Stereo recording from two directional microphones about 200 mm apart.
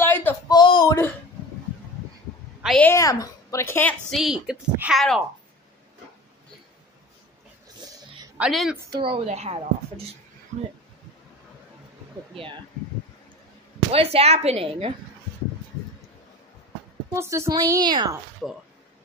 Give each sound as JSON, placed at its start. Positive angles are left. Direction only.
{"t": 0.0, "sound": "a sound", "side_deg": 10}
{"t": 0.5, "sound": "a sound", "side_deg": 20}
{"t": 2.6, "sound": "a woman's voice", "side_deg": 5}
{"t": 4.1, "sound": "speech", "side_deg": 0}
{"t": 8.4, "sound": "speech", "side_deg": 0}
{"t": 8.7, "sound": "a woman's voice", "side_deg": -20}
{"t": 13.9, "sound": "a woman's voice", "side_deg": -30}
{"t": 17.1, "sound": "a woman's voice", "side_deg": -15}
{"t": 18.4, "sound": "speech", "side_deg": 0}